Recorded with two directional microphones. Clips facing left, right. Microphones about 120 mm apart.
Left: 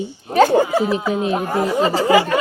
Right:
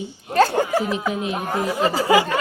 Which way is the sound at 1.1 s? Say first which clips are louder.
Left 6 dB; 35° left (ahead or behind).